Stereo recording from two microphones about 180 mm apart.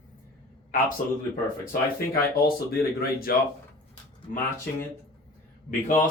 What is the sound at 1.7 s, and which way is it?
Speech, 55° left (ahead or behind).